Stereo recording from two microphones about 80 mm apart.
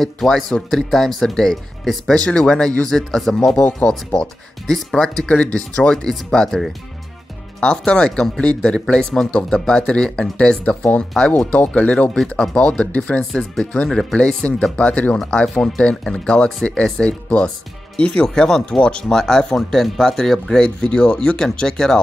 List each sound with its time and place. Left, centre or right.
0.0 s speech: centre
7.6 s speech: centre